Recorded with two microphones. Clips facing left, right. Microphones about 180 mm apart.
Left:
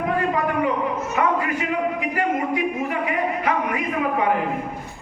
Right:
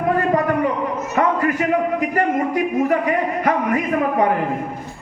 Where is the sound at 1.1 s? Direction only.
45° right (ahead or behind).